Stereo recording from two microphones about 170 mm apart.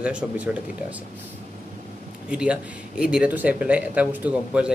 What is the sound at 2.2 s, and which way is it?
Speech, 5° right (ahead or behind).